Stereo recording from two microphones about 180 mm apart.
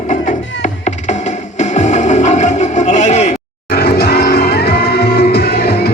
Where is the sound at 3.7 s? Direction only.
60° left (ahead or behind).